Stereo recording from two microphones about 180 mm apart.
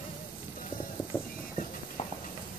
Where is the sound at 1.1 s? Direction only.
10° left (ahead or behind).